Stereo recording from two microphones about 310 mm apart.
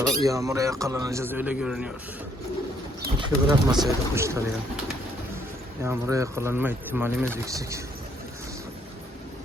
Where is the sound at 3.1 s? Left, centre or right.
Centre.